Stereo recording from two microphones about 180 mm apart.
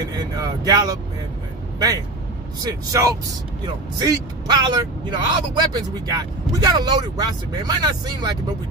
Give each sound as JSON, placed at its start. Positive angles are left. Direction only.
{"t": 0.0, "sound": "speech", "side_deg": -20}